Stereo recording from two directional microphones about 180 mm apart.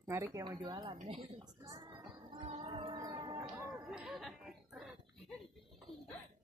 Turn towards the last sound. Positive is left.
turn(degrees=0)  # may be behind; listen again after turning